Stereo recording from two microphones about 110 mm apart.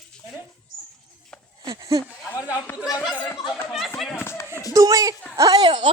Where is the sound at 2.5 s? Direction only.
30° left (ahead or behind).